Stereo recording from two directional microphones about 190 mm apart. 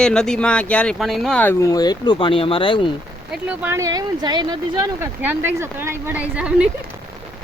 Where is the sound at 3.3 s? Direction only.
5° right (ahead or behind).